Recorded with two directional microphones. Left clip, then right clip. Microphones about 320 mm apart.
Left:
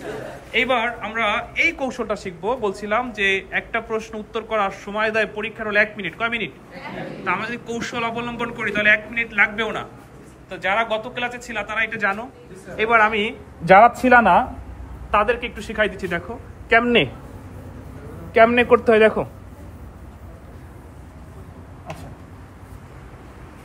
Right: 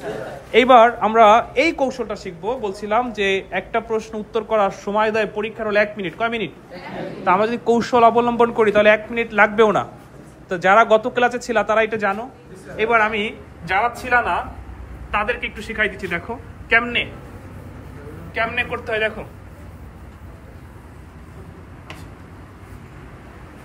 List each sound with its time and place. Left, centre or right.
1.0 s a man's voice: centre
1.9 s a man's voice: centre
10.5 s speech: right
11.2 s a man's voice: centre
13.7 s a man's voice: centre
15.0 s a man's voice: centre
18.3 s a man's voice: centre